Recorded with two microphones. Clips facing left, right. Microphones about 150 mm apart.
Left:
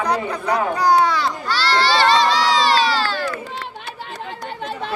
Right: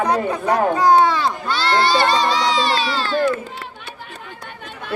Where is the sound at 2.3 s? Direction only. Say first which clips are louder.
Left 1 dB; 90° left.